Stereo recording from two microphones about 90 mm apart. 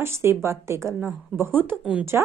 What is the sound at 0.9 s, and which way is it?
A woman's voice, 20° right (ahead or behind).